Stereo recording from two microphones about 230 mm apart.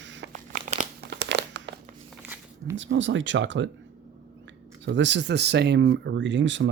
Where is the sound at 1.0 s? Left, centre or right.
Right.